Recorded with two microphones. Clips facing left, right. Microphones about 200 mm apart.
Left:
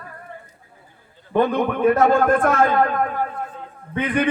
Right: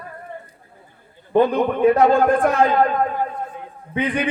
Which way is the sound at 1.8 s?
15° right (ahead or behind).